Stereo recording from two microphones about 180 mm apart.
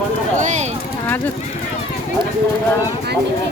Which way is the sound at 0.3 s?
45° right (ahead or behind).